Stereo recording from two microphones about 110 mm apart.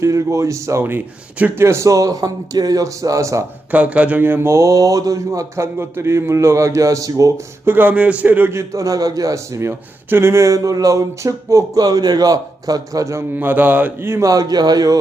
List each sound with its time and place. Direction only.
0.0 s a man's voice: 25° right (ahead or behind)
3.7 s a man's voice: 10° right (ahead or behind); by 7.3 s 30° right (ahead or behind)
7.6 s a man's voice: 20° right (ahead or behind)
13.3 s a man's voice: 15° right (ahead or behind); by 14.9 s 35° right (ahead or behind)